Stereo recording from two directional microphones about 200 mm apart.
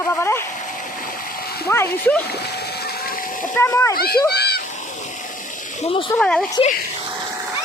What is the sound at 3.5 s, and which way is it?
Speech, 15° left (ahead or behind).